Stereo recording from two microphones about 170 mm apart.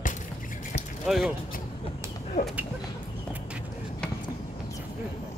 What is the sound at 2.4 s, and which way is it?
Speech, 45° left (ahead or behind).